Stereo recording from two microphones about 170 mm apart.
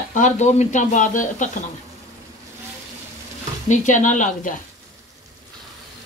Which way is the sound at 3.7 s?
45° left (ahead or behind).